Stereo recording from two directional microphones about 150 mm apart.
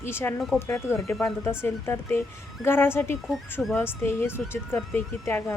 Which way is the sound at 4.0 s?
15° left (ahead or behind).